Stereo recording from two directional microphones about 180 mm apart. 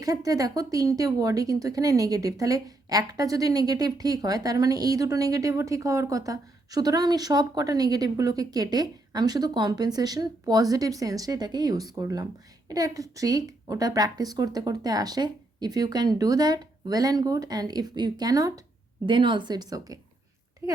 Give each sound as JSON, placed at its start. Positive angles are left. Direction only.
{"t": 0.0, "sound": "speech", "side_deg": -20}